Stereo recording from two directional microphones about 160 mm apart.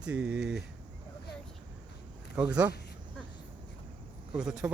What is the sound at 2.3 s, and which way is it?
Speech, 10° right (ahead or behind).